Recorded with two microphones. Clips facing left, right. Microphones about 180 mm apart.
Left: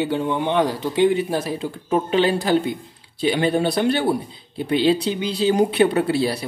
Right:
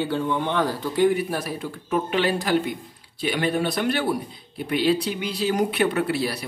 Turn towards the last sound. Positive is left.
turn(degrees=25)  # may be behind; listen again after turning